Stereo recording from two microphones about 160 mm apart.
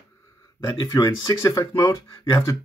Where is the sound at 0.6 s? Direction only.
20° left (ahead or behind).